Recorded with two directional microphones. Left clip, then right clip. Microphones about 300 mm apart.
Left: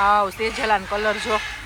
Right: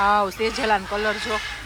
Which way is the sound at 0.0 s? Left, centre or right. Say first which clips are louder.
Left 1 dB; centre.